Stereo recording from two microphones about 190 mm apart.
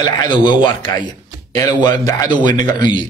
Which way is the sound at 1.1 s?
20° left (ahead or behind).